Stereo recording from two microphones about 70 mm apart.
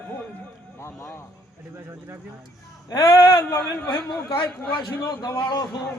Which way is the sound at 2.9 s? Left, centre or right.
Left.